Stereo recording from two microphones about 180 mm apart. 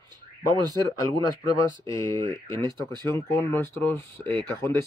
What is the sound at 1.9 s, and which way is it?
Speech, 15° left (ahead or behind).